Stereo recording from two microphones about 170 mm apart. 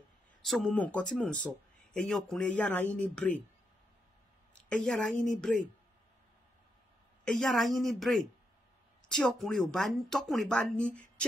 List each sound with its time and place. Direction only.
0.4 s speech: centre (ahead or behind)
4.6 s speech: 5° left (ahead or behind)
7.2 s speech: centre (ahead or behind)